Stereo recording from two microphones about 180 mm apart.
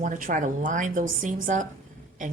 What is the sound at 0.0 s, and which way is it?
A woman's voice, 50° right (ahead or behind).